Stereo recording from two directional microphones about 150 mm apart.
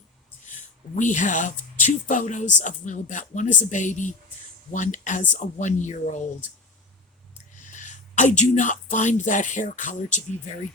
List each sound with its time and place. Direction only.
0.9 s speech: 55° left (ahead or behind)
7.7 s speech: 55° left (ahead or behind)